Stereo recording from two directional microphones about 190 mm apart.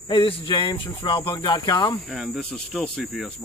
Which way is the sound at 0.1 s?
25° left (ahead or behind).